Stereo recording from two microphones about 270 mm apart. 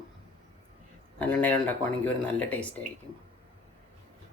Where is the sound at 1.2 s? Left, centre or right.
Centre.